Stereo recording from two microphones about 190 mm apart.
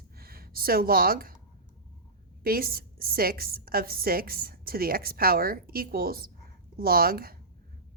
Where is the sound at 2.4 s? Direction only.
50° right (ahead or behind).